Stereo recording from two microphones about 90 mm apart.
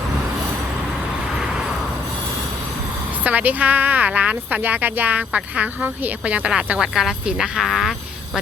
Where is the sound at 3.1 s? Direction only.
20° right (ahead or behind).